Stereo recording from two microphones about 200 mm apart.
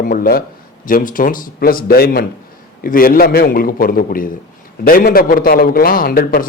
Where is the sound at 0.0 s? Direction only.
45° left (ahead or behind).